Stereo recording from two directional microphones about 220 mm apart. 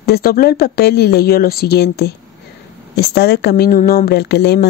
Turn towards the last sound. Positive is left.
turn(degrees=50)  # may be behind; listen again after turning